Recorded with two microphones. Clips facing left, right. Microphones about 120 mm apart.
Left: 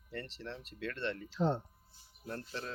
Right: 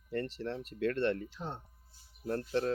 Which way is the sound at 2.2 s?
45° right (ahead or behind).